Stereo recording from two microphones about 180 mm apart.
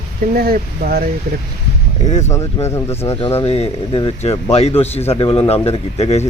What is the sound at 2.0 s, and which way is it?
Speech, 40° left (ahead or behind).